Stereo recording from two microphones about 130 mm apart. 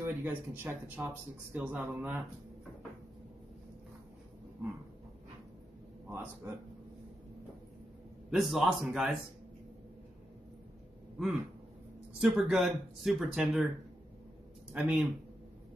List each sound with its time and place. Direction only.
0.0 s speech: 15° right (ahead or behind)
6.0 s speech: 15° right (ahead or behind)
8.3 s speech: centre (ahead or behind)
12.2 s speech: centre (ahead or behind)
14.7 s speech: 5° right (ahead or behind)